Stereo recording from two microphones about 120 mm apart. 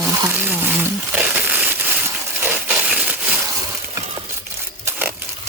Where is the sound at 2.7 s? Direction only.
5° right (ahead or behind).